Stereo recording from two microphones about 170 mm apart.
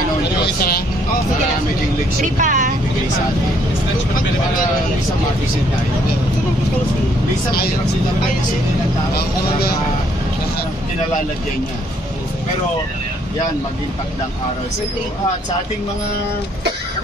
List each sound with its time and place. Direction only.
0.4 s speech: 65° left (ahead or behind)
2.2 s speech: 50° right (ahead or behind)
7.5 s speech: 65° left (ahead or behind)
9.1 s speech: 65° left (ahead or behind)